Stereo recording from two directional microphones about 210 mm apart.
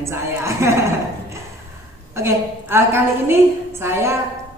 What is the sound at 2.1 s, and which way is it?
A woman's voice, 10° right (ahead or behind).